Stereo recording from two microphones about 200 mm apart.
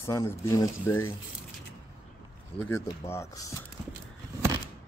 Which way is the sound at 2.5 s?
10° left (ahead or behind).